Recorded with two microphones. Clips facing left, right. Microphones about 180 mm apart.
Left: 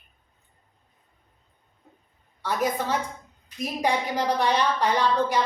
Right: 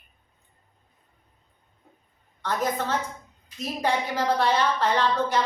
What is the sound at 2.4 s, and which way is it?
A woman's voice, 10° left (ahead or behind).